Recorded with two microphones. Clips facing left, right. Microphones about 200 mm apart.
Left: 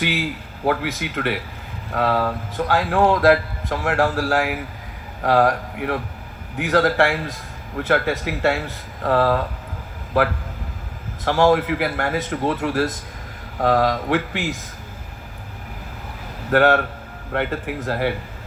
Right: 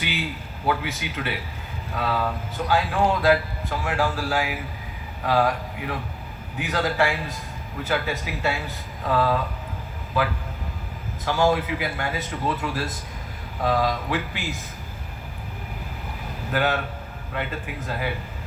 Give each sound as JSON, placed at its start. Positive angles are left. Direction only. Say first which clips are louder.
{"t": 0.7, "sound": "a man's voice", "louder": "left 3 dB", "side_deg": 70}
{"t": 11.3, "sound": "a man's voice", "louder": "left 5 dB", "side_deg": 75}
{"t": 16.5, "sound": "a man's voice", "louder": "left 8 dB", "side_deg": 65}